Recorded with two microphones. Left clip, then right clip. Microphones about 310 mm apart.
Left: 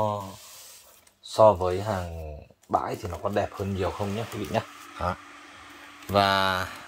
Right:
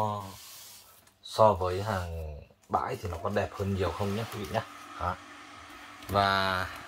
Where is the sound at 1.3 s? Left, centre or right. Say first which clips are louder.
Left 5 dB; left.